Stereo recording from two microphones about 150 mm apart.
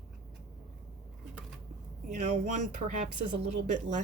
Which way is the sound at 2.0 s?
55° right (ahead or behind).